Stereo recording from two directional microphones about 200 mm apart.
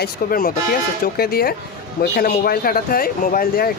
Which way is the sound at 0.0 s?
45° left (ahead or behind).